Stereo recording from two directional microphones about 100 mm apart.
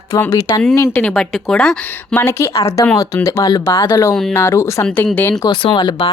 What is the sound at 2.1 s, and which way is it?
Speech, 25° left (ahead or behind).